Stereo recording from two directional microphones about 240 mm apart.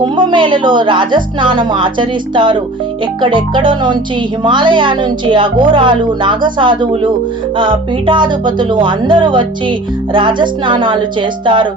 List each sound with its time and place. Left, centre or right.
0.0 s speech: centre